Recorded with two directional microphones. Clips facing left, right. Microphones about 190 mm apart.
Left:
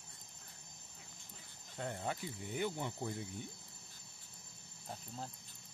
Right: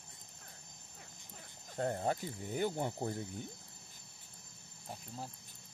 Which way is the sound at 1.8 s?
45° right (ahead or behind).